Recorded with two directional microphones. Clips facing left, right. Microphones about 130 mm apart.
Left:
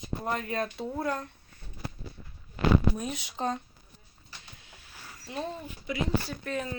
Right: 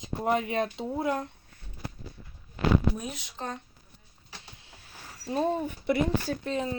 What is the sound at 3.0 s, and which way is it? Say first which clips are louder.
Speech: left 3 dB; centre (ahead or behind).